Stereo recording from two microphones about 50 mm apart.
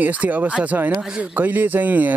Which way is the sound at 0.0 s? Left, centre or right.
Right.